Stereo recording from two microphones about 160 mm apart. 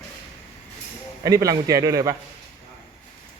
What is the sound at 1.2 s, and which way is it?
Speech, 20° right (ahead or behind).